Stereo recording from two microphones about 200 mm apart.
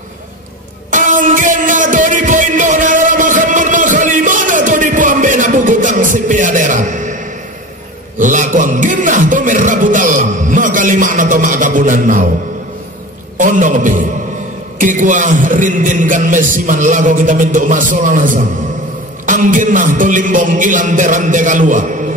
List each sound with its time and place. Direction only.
0.9 s music: 40° right (ahead or behind)
8.2 s music: 40° right (ahead or behind)
13.4 s music: 40° right (ahead or behind)